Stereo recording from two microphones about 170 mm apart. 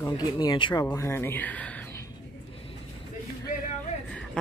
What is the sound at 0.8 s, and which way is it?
Speech, 15° left (ahead or behind).